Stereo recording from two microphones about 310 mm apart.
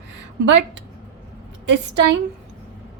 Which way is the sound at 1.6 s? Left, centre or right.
Right.